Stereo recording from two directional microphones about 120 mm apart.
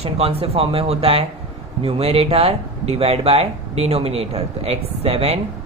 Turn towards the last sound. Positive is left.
turn(degrees=-65)  # may be behind; listen again after turning